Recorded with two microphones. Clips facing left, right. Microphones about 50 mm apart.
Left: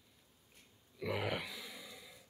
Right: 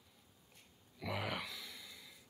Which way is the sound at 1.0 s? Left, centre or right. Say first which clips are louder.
Left 3 dB; centre.